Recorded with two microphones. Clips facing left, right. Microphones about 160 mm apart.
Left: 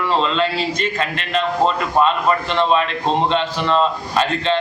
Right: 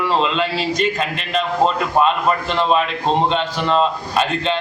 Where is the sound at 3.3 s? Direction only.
10° right (ahead or behind).